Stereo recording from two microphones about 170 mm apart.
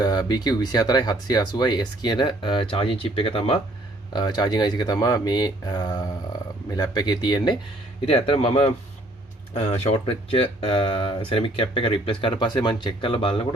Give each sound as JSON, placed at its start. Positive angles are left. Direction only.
{"t": 0.0, "sound": "speech", "side_deg": 25}
{"t": 8.0, "sound": "speech", "side_deg": 35}